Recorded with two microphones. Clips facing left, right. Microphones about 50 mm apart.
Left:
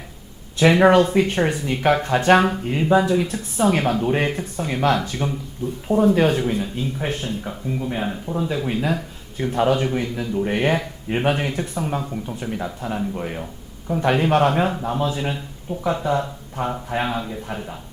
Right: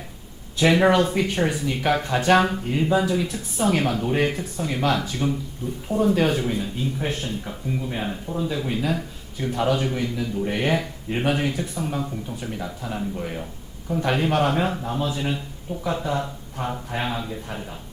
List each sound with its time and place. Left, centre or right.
0.6 s a man's voice: centre
4.4 s a man's voice: left
7.1 s a man's voice: left
7.4 s a man's voice: centre; by 11.9 s left
11.9 s a man's voice: left
14.6 s a man's voice: centre
14.8 s a man's voice: left